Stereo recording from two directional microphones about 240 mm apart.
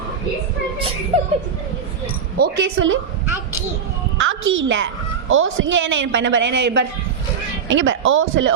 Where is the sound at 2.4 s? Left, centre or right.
Right.